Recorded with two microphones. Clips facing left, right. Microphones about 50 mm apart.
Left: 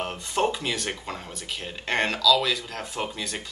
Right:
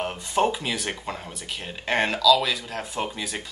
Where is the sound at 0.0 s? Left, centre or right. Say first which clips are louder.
Right 2 dB; centre.